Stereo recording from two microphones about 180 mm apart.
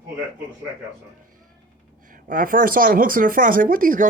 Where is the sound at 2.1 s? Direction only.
50° right (ahead or behind).